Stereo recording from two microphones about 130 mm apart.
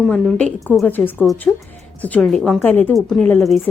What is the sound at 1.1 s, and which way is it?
Speech, centre (ahead or behind).